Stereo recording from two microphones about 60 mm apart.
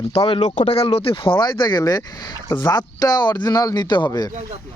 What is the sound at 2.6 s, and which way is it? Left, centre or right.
Speech, left.